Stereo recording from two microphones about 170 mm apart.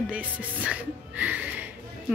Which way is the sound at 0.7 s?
10° right (ahead or behind).